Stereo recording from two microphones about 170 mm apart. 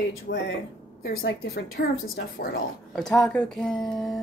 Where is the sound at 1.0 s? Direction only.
70° left (ahead or behind).